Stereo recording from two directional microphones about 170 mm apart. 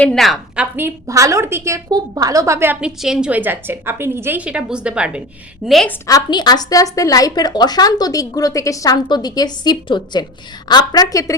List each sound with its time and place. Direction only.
0.0 s a woman's voice: centre (ahead or behind)
6.1 s speech: 20° left (ahead or behind)